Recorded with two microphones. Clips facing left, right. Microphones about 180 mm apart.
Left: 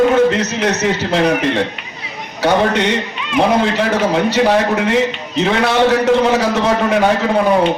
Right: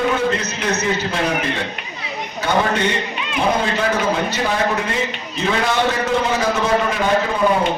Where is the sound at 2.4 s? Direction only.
75° left (ahead or behind).